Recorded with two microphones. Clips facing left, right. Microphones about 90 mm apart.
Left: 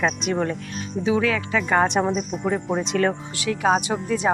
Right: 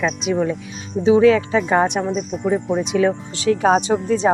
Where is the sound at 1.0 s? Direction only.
25° right (ahead or behind).